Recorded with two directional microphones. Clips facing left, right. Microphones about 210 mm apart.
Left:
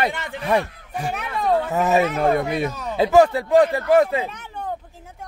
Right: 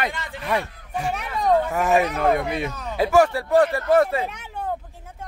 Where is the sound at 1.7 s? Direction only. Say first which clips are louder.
Left 1 dB; 20° left (ahead or behind).